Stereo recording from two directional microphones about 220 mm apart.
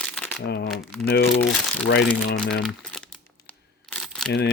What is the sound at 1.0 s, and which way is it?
Speech, 50° left (ahead or behind).